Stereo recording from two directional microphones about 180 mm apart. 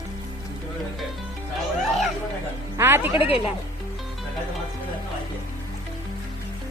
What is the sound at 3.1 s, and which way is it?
Speech, 30° left (ahead or behind).